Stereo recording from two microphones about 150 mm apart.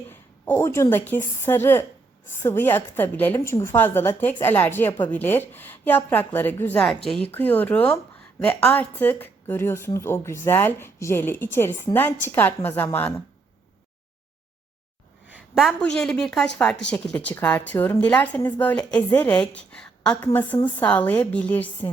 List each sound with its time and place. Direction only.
0.1 s a woman's voice: 15° left (ahead or behind)
15.3 s a woman's voice: centre (ahead or behind)